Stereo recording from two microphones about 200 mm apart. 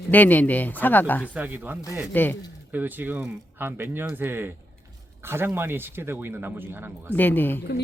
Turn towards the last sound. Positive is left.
turn(degrees=10)  # may be behind; listen again after turning